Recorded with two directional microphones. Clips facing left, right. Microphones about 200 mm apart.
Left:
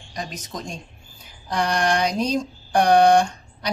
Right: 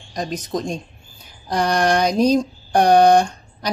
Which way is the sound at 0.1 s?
40° right (ahead or behind).